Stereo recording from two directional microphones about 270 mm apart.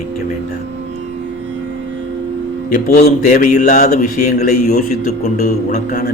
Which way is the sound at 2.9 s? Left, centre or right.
Left.